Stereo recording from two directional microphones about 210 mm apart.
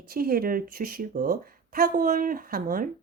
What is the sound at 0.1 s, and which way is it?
A woman's voice, 45° right (ahead or behind).